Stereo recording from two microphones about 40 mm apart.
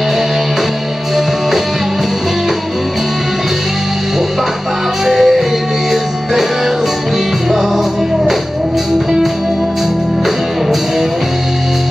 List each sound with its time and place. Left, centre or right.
5.0 s music: centre